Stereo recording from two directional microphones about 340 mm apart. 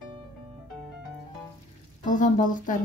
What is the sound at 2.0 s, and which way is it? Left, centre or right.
Speech, left.